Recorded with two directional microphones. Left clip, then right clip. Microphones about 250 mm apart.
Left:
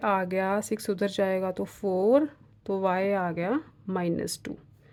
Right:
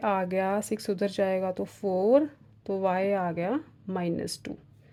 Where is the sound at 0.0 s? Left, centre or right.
Centre.